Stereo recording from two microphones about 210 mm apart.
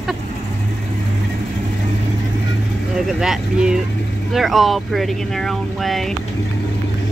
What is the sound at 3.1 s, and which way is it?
Speech, 5° right (ahead or behind).